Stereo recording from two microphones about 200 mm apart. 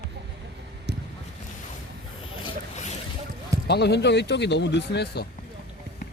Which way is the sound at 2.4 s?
35° left (ahead or behind).